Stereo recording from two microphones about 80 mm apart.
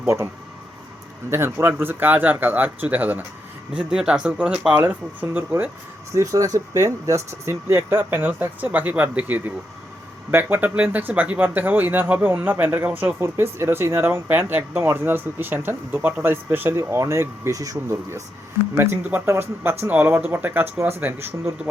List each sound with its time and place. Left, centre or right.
1.3 s speech: right
3.7 s speech: centre
4.8 s speech: right
6.1 s speech: right
18.8 s speech: right